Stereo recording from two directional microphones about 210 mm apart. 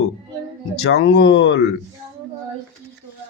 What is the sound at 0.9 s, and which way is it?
Speech, 60° left (ahead or behind).